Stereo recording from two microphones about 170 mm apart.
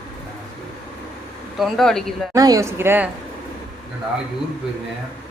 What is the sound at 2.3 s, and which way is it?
Speech, 20° right (ahead or behind).